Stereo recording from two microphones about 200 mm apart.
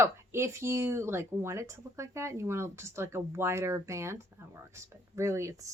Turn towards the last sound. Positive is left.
turn(degrees=-15)  # may be behind; listen again after turning